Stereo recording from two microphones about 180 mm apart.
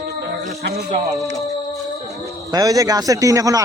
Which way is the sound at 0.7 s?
35° right (ahead or behind).